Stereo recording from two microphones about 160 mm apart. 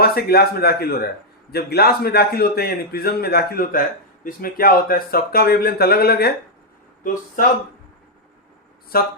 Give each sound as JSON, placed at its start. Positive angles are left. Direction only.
{"t": 0.0, "sound": "a man's voice", "side_deg": 75}
{"t": 7.0, "sound": "speech", "side_deg": 55}
{"t": 8.9, "sound": "a man's voice", "side_deg": 65}